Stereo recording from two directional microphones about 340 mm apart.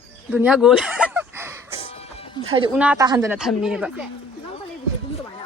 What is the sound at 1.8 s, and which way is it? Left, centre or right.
Music, centre.